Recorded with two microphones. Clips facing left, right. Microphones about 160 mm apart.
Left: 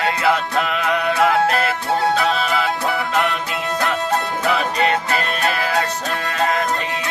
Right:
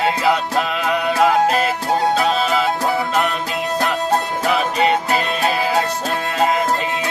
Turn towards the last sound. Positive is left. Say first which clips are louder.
# right 2 dB
turn(degrees=-20)  # may be behind; listen again after turning